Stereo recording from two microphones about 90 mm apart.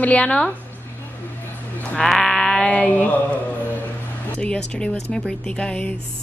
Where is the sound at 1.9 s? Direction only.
5° left (ahead or behind).